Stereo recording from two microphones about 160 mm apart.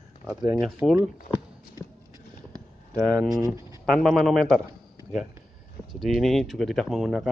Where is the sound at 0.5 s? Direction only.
Centre (ahead or behind).